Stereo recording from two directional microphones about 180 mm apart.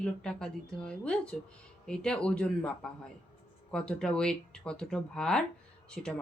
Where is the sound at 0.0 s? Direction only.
5° left (ahead or behind).